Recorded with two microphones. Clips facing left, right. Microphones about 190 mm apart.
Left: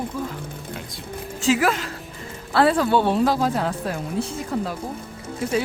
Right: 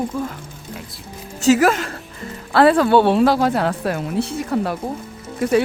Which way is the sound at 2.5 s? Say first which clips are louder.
Right 5 dB; 70° right (ahead or behind).